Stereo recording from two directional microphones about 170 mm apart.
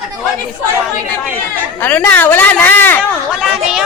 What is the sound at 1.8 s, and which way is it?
Speech, 10° left (ahead or behind).